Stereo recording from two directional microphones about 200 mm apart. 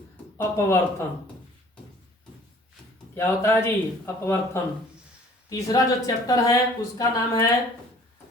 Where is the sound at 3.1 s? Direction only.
15° left (ahead or behind).